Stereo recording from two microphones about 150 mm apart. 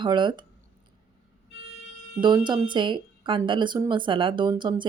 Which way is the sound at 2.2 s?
30° right (ahead or behind).